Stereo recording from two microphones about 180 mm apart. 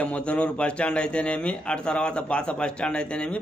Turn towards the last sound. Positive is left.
turn(degrees=5)  # may be behind; listen again after turning